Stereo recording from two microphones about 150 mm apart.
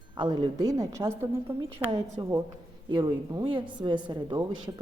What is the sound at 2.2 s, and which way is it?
A woman's voice, 30° right (ahead or behind).